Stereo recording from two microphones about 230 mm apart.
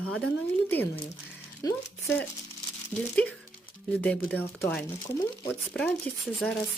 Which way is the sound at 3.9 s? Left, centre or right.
Centre.